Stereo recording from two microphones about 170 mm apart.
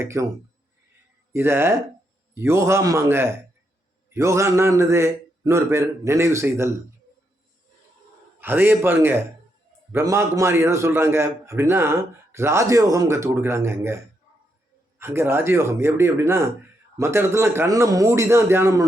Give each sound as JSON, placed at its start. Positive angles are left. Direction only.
{"t": 0.0, "sound": "a man's voice", "side_deg": -15}
{"t": 1.3, "sound": "a man's voice", "side_deg": -15}
{"t": 8.4, "sound": "a man's voice", "side_deg": -10}